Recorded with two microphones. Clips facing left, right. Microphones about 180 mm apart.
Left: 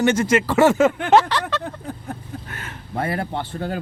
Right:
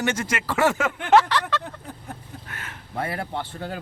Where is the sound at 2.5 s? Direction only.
30° left (ahead or behind).